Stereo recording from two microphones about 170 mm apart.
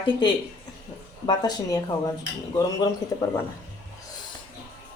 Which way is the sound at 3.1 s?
20° left (ahead or behind).